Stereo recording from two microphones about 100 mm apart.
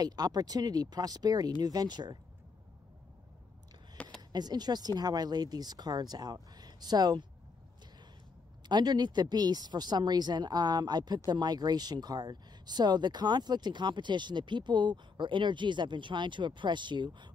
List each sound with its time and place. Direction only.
0.0 s speech: 40° right (ahead or behind)
4.3 s speech: 45° right (ahead or behind)
8.6 s speech: 45° right (ahead or behind)